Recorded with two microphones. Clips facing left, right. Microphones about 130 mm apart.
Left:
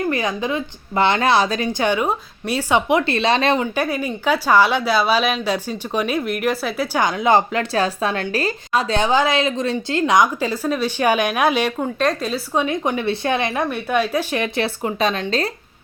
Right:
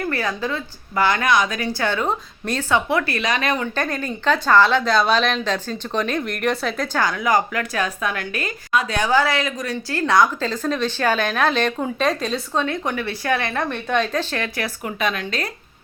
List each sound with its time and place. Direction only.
0.0 s a woman's voice: 15° left (ahead or behind)
3.8 s speech: 10° left (ahead or behind)
7.0 s a woman's voice: 20° left (ahead or behind)
11.8 s a woman's voice: centre (ahead or behind)
12.5 s a woman's voice: 15° left (ahead or behind)